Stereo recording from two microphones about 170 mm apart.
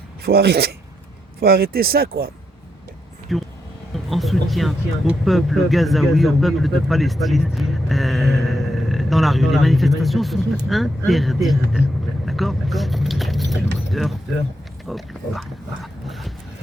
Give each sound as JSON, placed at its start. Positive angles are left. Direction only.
{"t": 0.3, "sound": "speech", "side_deg": -70}
{"t": 3.3, "sound": "speech", "side_deg": 0}
{"t": 14.8, "sound": "pig", "side_deg": 0}